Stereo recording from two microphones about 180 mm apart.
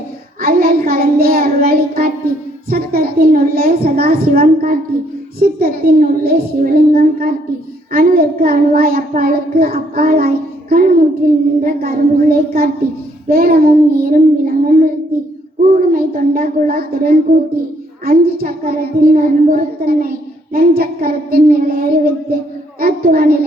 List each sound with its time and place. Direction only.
0.4 s child singing: 55° right (ahead or behind)
2.6 s a woman's voice: 55° right (ahead or behind)